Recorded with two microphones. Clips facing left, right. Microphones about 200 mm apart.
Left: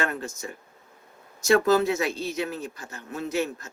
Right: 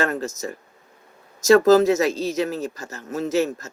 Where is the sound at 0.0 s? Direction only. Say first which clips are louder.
Right 5 dB; 40° right (ahead or behind).